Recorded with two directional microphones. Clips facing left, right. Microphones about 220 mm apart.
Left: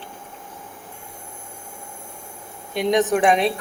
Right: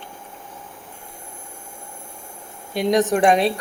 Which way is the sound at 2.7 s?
Centre (ahead or behind).